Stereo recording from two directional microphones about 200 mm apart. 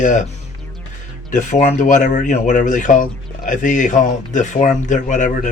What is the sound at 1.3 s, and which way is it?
Speech, 40° left (ahead or behind).